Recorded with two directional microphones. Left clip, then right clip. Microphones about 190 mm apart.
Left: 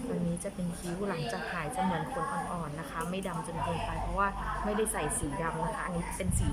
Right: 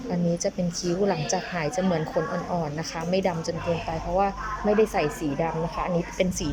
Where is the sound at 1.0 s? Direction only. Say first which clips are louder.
Right 7 dB; 25° right (ahead or behind).